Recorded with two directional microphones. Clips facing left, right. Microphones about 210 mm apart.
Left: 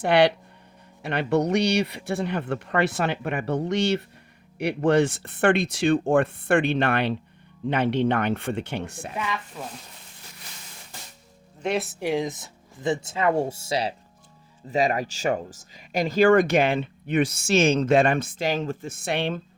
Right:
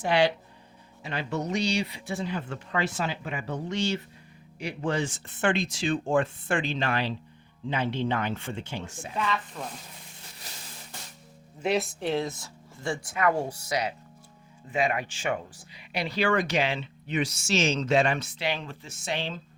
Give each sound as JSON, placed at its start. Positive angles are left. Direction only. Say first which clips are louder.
{"t": 0.0, "sound": "speech", "louder": "left 5 dB", "side_deg": 65}
{"t": 9.1, "sound": "speech", "louder": "right 2 dB", "side_deg": 15}
{"t": 11.6, "sound": "speech", "louder": "left 1 dB", "side_deg": 0}